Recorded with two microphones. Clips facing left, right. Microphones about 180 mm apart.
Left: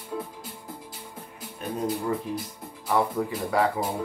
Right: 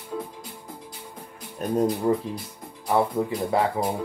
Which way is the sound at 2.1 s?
30° right (ahead or behind).